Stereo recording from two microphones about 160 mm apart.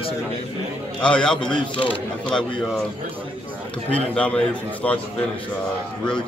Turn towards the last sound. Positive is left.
turn(degrees=10)  # may be behind; listen again after turning